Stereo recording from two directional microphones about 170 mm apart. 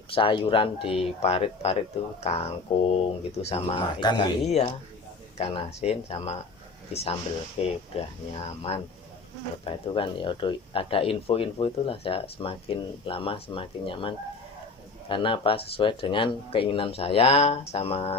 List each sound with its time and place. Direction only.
0.1 s speech: 30° left (ahead or behind)
5.4 s speech: 35° left (ahead or behind)
15.1 s speech: 30° left (ahead or behind)